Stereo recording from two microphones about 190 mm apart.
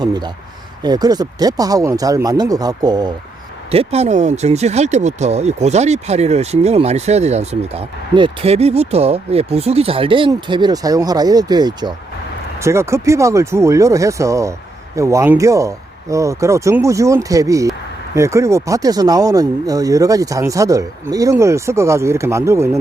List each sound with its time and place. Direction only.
0.0 s speech: 20° right (ahead or behind)
3.7 s speech: 35° right (ahead or behind); by 22.8 s 15° right (ahead or behind)